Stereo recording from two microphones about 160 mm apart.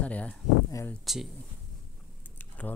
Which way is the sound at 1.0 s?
Centre (ahead or behind).